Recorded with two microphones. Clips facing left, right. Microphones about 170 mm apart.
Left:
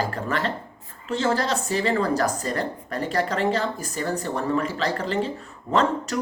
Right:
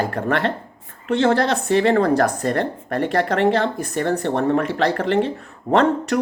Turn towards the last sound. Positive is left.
turn(degrees=-60)  # may be behind; listen again after turning